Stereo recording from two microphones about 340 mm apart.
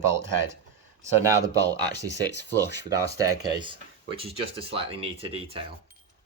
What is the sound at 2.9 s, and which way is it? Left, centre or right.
Speech, centre.